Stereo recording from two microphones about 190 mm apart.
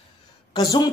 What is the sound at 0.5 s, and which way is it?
Speech, 20° left (ahead or behind).